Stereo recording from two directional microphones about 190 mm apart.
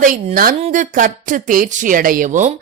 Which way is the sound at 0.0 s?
45° right (ahead or behind).